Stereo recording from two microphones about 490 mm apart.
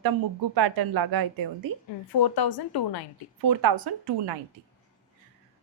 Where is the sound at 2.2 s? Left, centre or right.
Left.